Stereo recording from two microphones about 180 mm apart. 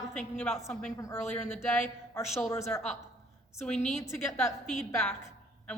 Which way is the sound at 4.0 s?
15° left (ahead or behind).